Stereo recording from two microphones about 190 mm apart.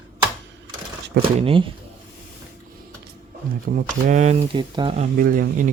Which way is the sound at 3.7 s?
40° right (ahead or behind).